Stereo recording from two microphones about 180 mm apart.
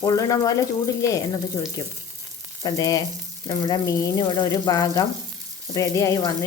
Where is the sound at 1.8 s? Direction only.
20° left (ahead or behind).